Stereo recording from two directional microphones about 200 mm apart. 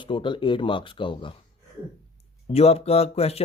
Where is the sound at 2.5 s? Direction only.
30° left (ahead or behind).